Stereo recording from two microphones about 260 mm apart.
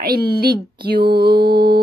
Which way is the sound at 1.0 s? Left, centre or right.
Centre.